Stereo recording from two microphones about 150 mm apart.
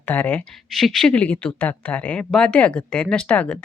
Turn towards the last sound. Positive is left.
turn(degrees=10)  # may be behind; listen again after turning